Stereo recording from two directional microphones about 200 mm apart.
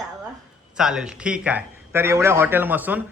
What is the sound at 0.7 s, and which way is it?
A man's voice, 5° right (ahead or behind).